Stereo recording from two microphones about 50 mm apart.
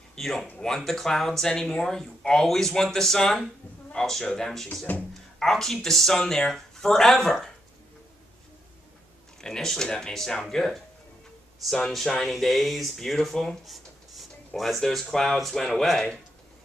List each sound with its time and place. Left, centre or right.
0.1 s speech: centre
4.9 s speech: left
5.4 s speech: centre
9.4 s speech: centre